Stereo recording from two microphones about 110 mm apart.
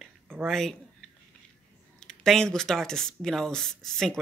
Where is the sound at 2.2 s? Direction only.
5° left (ahead or behind).